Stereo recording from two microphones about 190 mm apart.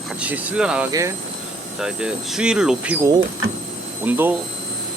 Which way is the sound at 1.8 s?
5° right (ahead or behind).